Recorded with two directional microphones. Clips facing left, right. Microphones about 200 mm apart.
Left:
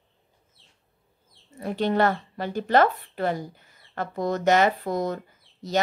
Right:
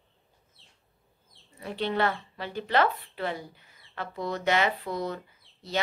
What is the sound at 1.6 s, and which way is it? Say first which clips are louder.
A woman's voice: left 5 dB; 45° left (ahead or behind).